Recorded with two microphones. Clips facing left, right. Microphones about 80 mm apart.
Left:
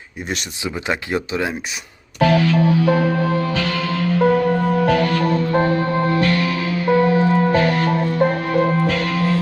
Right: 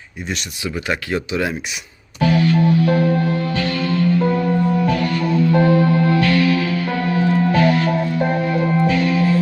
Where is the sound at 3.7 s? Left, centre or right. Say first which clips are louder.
Right 2 dB; left.